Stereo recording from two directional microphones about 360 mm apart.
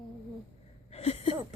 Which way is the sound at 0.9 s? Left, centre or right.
Centre.